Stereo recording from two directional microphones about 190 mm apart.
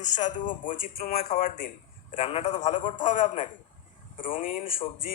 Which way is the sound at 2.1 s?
30° left (ahead or behind).